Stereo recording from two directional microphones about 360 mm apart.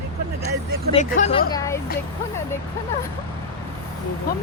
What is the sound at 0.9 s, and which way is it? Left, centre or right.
Speech, centre.